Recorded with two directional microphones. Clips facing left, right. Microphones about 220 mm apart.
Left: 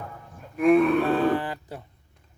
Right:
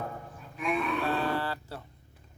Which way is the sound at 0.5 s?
50° left (ahead or behind).